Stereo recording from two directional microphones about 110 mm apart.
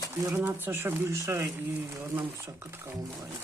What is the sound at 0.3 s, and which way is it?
Speech, 20° right (ahead or behind).